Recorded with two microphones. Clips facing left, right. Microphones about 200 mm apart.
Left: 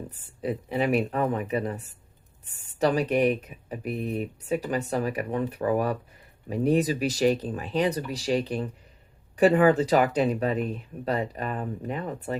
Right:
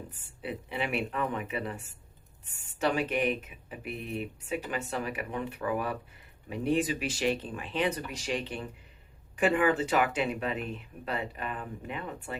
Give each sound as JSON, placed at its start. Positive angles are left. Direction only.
{"t": 0.1, "sound": "speech", "side_deg": 35}